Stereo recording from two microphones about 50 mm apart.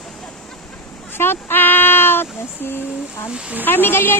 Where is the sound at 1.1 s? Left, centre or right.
Left.